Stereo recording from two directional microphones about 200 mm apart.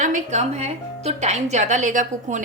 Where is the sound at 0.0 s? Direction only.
35° right (ahead or behind).